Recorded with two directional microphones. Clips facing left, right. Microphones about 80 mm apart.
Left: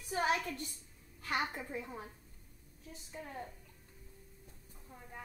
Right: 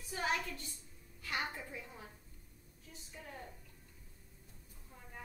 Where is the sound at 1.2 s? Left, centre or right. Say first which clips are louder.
Left 4 dB; left.